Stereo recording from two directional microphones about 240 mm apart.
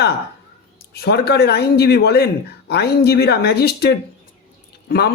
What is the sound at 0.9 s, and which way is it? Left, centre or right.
Speech, left.